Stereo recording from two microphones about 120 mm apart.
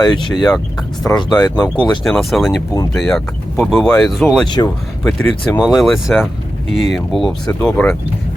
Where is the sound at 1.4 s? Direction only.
30° left (ahead or behind).